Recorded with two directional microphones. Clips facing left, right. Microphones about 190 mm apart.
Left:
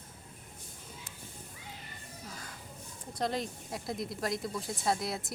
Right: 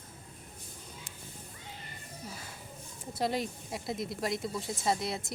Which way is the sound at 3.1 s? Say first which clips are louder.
Right 2 dB; 5° right (ahead or behind).